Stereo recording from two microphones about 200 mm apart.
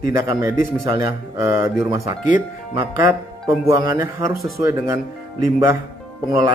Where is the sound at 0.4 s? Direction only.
15° right (ahead or behind).